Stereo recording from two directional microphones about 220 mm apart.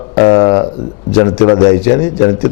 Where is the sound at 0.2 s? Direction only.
25° left (ahead or behind).